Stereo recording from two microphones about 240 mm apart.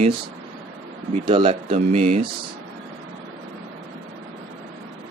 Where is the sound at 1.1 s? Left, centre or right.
Right.